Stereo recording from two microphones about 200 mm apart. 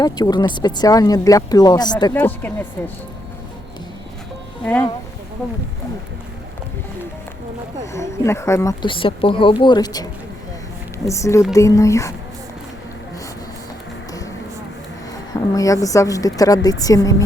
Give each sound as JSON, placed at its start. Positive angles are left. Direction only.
{"t": 0.0, "sound": "speech", "side_deg": 20}
{"t": 2.2, "sound": "a woman's voice", "side_deg": 10}
{"t": 4.6, "sound": "a woman's voice", "side_deg": 10}
{"t": 7.9, "sound": "a woman's voice", "side_deg": 15}
{"t": 15.3, "sound": "a woman's voice", "side_deg": 15}